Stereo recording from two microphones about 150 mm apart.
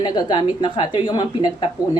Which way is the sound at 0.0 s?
30° left (ahead or behind).